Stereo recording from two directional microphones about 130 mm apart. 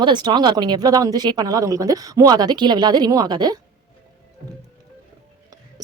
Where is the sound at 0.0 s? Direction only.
35° right (ahead or behind).